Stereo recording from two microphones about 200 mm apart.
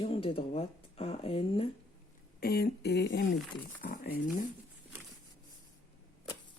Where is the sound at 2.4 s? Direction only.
50° left (ahead or behind).